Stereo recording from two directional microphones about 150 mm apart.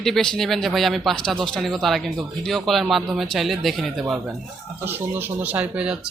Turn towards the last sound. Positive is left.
turn(degrees=-10)  # may be behind; listen again after turning